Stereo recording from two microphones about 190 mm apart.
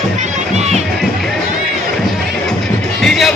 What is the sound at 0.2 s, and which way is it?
Music, 40° right (ahead or behind).